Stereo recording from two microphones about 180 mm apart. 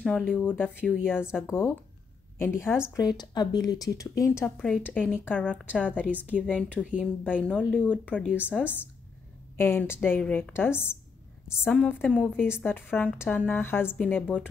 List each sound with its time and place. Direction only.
0.0 s speech: centre (ahead or behind)
0.7 s speech: 5° right (ahead or behind)
2.3 s a woman's voice: 15° left (ahead or behind)
8.3 s speech: 5° right (ahead or behind)
9.6 s a woman's voice: 10° left (ahead or behind)